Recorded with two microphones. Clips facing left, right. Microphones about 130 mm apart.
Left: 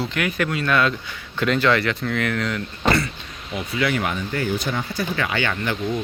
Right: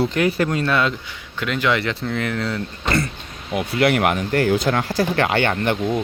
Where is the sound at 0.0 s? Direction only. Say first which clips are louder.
Right 5 dB; 30° right (ahead or behind).